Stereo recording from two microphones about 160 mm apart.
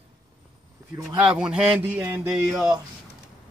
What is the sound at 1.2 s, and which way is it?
A man's voice, 5° right (ahead or behind).